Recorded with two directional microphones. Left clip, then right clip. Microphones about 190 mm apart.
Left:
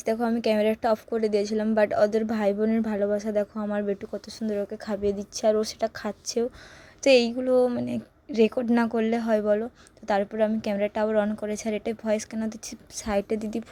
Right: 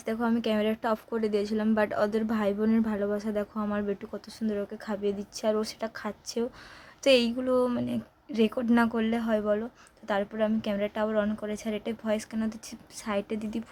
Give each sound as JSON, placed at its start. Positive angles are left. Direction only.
{"t": 0.0, "sound": "a woman's voice", "side_deg": 20}